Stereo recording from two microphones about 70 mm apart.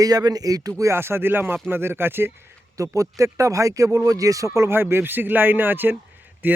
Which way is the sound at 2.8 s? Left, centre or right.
Right.